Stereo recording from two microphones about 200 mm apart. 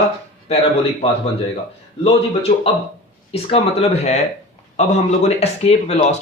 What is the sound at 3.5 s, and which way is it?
Speech, 30° left (ahead or behind).